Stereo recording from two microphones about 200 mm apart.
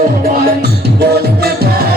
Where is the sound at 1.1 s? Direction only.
50° right (ahead or behind).